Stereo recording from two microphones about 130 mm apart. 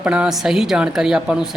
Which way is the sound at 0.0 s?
10° right (ahead or behind).